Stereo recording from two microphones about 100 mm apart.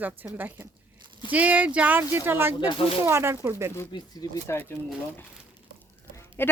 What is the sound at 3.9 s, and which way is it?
Speech, 50° left (ahead or behind).